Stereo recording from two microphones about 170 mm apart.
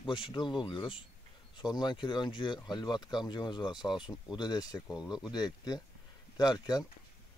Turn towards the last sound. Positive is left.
turn(degrees=25)  # may be behind; listen again after turning